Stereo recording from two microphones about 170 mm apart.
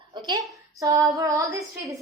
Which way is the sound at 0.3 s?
20° right (ahead or behind).